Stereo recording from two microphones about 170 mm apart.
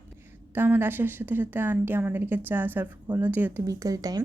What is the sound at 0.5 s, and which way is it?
A woman's voice, 10° right (ahead or behind).